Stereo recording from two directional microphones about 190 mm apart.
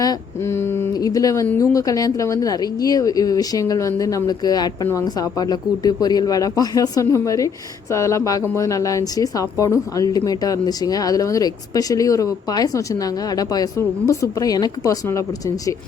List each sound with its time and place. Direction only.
0.0 s speech: 15° left (ahead or behind)